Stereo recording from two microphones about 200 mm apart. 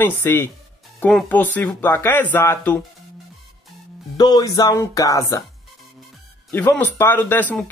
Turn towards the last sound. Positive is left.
turn(degrees=10)  # may be behind; listen again after turning